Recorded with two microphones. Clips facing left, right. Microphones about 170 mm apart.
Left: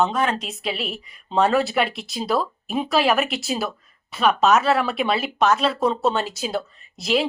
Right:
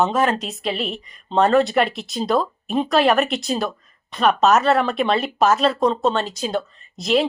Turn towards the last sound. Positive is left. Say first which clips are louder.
# right 3 dB
turn(degrees=0)  # may be behind; listen again after turning